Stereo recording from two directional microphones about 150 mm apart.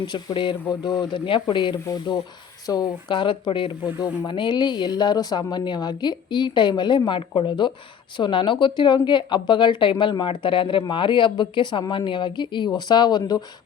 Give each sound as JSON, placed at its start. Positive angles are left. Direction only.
{"t": 0.0, "sound": "a woman's voice", "side_deg": 30}